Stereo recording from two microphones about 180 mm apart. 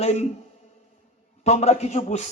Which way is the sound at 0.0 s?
35° left (ahead or behind).